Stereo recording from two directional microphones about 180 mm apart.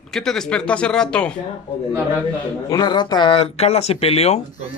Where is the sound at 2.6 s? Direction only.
25° left (ahead or behind).